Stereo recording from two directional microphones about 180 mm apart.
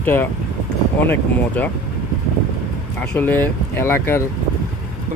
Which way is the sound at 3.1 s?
10° left (ahead or behind).